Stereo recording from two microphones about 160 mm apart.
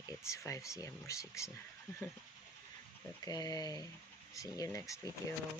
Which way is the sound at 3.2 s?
25° left (ahead or behind).